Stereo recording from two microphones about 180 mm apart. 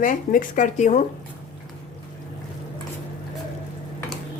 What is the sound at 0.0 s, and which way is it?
Speech, 45° left (ahead or behind).